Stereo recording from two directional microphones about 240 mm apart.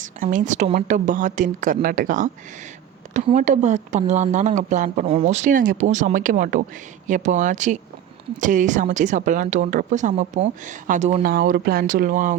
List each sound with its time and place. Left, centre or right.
0.0 s a woman's voice: right